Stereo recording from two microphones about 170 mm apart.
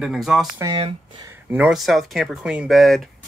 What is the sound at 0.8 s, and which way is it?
Speech, 30° right (ahead or behind).